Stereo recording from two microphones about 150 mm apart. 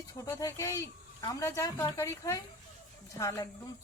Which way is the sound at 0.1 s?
20° left (ahead or behind).